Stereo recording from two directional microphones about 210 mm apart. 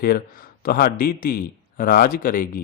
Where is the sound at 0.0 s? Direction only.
45° left (ahead or behind).